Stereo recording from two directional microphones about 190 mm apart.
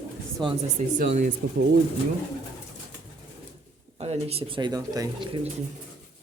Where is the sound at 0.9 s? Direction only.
40° right (ahead or behind).